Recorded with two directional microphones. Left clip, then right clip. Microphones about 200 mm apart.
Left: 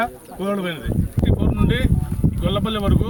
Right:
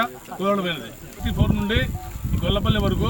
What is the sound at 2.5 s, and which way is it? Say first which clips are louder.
Speech: right 1 dB; 20° left (ahead or behind).